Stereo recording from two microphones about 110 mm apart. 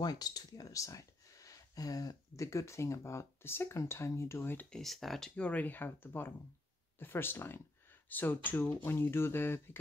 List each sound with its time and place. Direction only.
0.0 s speech: 35° left (ahead or behind); by 4.6 s 20° left (ahead or behind)
4.6 s speech: centre (ahead or behind); by 9.6 s 20° left (ahead or behind)